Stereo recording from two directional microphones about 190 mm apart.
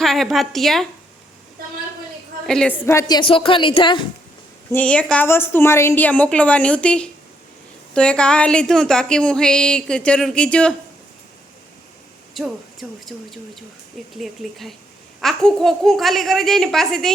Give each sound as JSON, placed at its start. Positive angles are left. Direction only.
{"t": 0.0, "sound": "a woman's voice", "side_deg": 0}
{"t": 2.5, "sound": "a woman's voice", "side_deg": 5}
{"t": 4.7, "sound": "a woman's voice", "side_deg": 5}
{"t": 12.4, "sound": "a woman's voice", "side_deg": 0}